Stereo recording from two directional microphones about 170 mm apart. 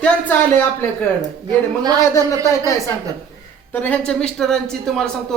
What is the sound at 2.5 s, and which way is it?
Speech, 15° left (ahead or behind).